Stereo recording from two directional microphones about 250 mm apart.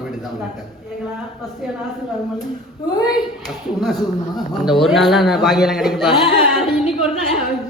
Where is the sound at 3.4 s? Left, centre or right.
Centre.